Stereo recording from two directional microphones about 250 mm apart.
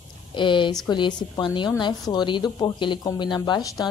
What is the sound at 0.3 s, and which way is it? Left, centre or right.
A woman's voice, centre.